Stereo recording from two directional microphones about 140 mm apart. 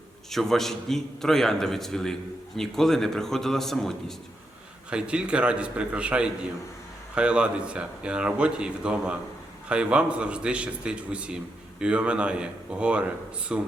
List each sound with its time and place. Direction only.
0.3 s a man's voice: centre (ahead or behind)